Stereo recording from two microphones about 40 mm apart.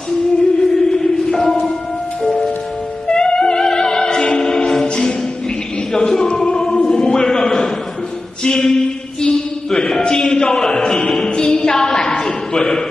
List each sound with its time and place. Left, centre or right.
0.6 s music: centre
3.1 s music: left
5.9 s a sound: centre